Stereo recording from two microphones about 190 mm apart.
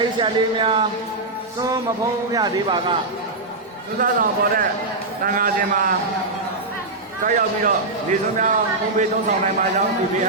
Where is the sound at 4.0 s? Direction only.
45° right (ahead or behind).